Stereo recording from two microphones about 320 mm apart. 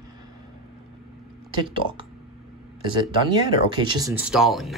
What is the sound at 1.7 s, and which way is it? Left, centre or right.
Speech, centre.